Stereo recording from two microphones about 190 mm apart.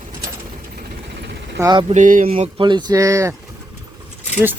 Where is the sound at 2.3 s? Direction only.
30° right (ahead or behind).